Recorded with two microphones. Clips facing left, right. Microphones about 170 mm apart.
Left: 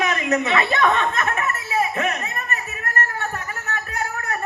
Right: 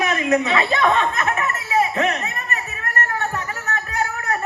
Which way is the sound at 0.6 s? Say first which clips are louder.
Right 1 dB; 20° right (ahead or behind).